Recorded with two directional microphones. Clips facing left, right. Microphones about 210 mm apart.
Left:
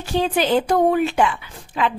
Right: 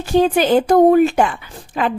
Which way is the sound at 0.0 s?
45° right (ahead or behind).